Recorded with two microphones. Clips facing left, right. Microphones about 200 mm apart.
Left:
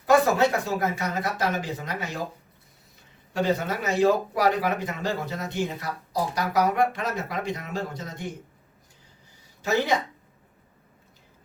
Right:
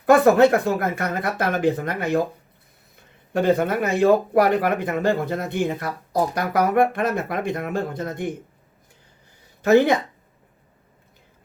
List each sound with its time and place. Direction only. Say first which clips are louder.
0.0 s speech: right 6 dB; 55° right (ahead or behind)
3.3 s speech: right 6 dB; 55° right (ahead or behind)
9.6 s speech: right 8 dB; 55° right (ahead or behind)